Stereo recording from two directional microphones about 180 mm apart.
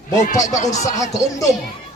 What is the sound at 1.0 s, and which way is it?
Speech, 20° left (ahead or behind).